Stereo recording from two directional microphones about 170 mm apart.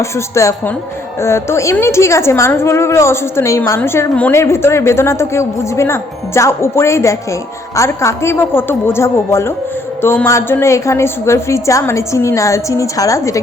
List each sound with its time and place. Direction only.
0.0 s a woman's voice: 15° left (ahead or behind)